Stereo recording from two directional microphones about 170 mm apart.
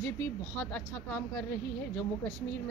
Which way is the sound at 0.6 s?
5° left (ahead or behind).